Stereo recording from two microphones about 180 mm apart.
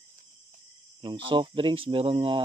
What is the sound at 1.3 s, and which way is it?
Speech, 30° right (ahead or behind).